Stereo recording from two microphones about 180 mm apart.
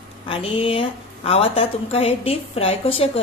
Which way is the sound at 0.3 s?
30° left (ahead or behind).